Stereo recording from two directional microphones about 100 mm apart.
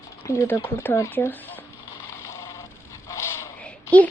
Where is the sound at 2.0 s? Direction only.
30° left (ahead or behind).